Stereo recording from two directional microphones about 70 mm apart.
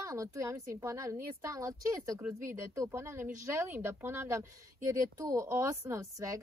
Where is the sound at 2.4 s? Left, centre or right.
Right.